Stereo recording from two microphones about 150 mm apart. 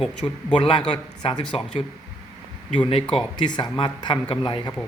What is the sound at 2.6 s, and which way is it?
Speech, 35° left (ahead or behind).